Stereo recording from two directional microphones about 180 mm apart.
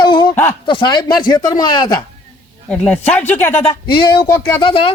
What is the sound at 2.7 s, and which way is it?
A man's voice, 5° left (ahead or behind).